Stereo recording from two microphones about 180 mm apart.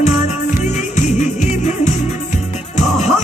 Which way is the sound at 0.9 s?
40° left (ahead or behind).